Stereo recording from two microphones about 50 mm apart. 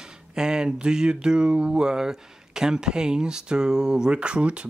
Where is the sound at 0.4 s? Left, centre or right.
Centre.